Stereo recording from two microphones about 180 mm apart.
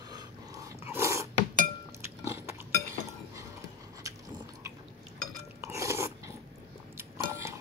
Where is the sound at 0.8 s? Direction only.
15° right (ahead or behind).